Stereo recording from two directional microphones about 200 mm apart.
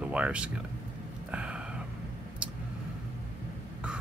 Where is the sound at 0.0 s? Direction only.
5° right (ahead or behind).